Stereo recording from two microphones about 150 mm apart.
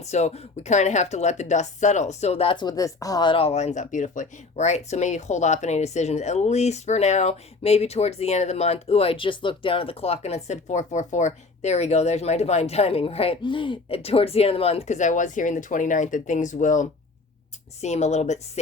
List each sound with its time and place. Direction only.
0.0 s speech: 45° left (ahead or behind)